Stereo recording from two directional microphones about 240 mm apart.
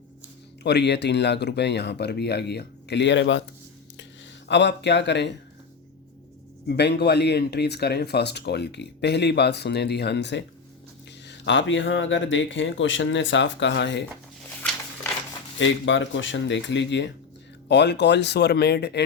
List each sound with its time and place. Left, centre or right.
0.6 s speech: left
4.4 s speech: left
6.7 s speech: left
15.5 s speech: left